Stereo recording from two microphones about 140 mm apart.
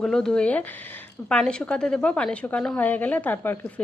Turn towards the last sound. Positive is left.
turn(degrees=15)  # may be behind; listen again after turning